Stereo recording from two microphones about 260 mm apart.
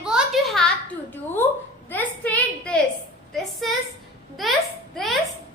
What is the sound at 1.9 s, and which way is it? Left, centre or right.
A woman's voice, centre.